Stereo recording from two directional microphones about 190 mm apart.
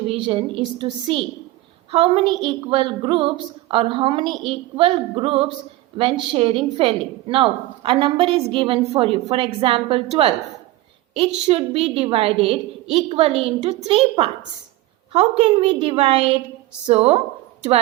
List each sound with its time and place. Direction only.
0.1 s a woman's voice: 30° right (ahead or behind)
11.3 s a woman's voice: 30° right (ahead or behind)